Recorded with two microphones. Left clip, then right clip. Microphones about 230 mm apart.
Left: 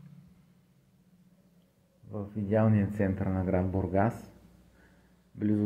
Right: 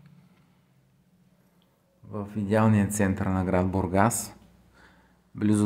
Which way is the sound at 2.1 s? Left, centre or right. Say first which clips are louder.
Right 3 dB; right.